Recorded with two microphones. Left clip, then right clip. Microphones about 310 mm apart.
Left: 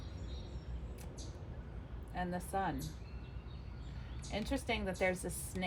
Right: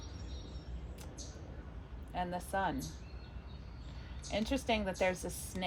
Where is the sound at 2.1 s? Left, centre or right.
Right.